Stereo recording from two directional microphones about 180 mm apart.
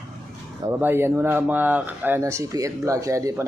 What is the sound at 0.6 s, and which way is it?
Speech, 10° right (ahead or behind).